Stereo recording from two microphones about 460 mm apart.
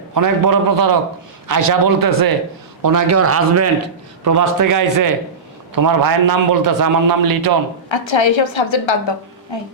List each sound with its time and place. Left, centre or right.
0.1 s a man's voice: right
7.9 s a woman's voice: left